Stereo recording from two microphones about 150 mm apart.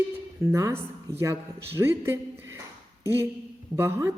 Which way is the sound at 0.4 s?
20° right (ahead or behind).